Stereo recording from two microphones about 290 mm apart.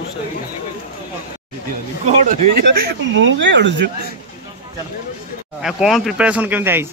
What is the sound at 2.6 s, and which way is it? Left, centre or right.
Speech, right.